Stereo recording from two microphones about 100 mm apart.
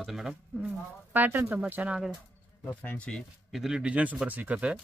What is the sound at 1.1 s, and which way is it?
Speech, 20° right (ahead or behind).